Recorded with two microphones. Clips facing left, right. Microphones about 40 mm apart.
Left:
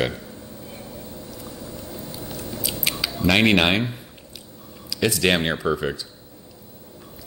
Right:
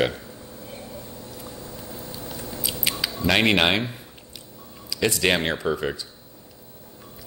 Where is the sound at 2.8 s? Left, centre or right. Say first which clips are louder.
Left 1 dB; centre.